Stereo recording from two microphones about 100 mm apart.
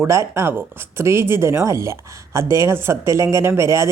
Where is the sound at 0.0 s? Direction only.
30° right (ahead or behind).